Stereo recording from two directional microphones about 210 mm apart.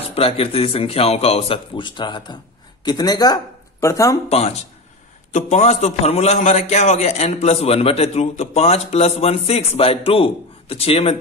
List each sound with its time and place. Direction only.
0.1 s a man's voice: 25° left (ahead or behind)
4.3 s a man's voice: 30° left (ahead or behind)